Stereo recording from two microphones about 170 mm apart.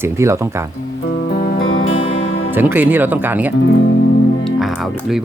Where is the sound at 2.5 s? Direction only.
10° right (ahead or behind).